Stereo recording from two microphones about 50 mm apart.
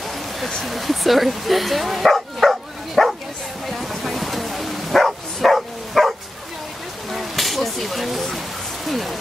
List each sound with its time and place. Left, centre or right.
0.7 s speech: centre
3.6 s bow-wow: centre
7.1 s a sound: centre